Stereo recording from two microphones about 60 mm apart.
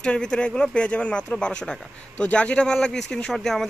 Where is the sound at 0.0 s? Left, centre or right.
Centre.